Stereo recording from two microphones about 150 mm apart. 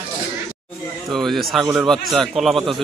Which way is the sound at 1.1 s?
Centre (ahead or behind).